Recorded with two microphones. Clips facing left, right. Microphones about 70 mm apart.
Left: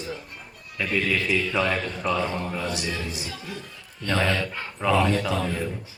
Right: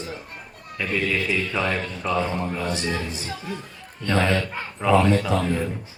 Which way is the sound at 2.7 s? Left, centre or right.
Right.